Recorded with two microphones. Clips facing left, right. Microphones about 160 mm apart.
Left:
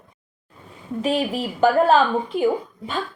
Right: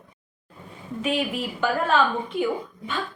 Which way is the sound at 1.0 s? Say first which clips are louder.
Left 3 dB; 35° left (ahead or behind).